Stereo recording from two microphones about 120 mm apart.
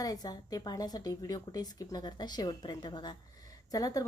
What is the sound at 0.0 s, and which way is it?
A woman's voice, 30° left (ahead or behind).